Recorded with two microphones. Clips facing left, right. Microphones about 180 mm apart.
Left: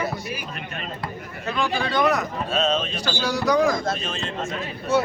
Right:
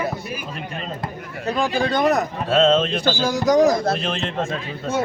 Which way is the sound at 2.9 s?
50° right (ahead or behind).